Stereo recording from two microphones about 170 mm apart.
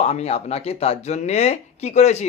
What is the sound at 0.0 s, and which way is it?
Speech, 40° left (ahead or behind).